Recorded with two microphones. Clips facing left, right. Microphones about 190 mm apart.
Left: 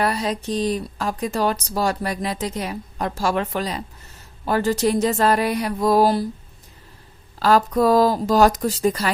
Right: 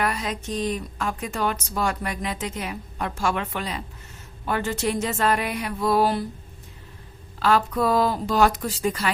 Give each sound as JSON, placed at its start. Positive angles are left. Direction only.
{"t": 0.0, "sound": "speech", "side_deg": 35}
{"t": 7.3, "sound": "speech", "side_deg": 40}